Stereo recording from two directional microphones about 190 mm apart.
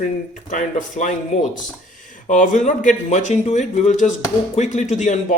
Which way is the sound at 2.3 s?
40° left (ahead or behind).